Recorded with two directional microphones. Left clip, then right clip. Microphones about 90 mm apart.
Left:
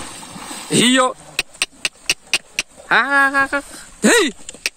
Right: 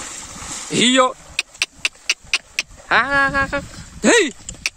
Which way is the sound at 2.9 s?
55° right (ahead or behind).